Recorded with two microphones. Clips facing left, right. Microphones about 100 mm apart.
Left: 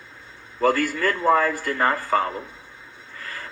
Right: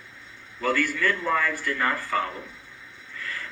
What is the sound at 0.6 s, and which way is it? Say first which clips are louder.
Speech: left 5 dB; 40° left (ahead or behind).